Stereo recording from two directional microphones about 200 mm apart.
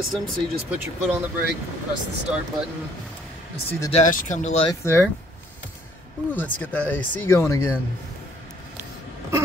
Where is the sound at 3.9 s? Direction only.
35° left (ahead or behind).